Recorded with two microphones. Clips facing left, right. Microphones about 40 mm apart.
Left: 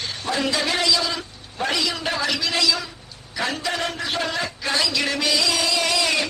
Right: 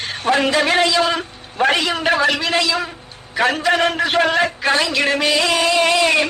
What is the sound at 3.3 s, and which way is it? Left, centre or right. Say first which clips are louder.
A man's voice: right 9 dB; right.